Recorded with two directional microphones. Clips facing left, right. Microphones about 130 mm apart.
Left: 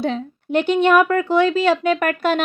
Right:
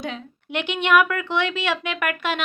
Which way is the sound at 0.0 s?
35° left (ahead or behind).